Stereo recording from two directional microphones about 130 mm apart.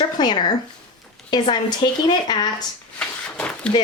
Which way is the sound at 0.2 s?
35° left (ahead or behind).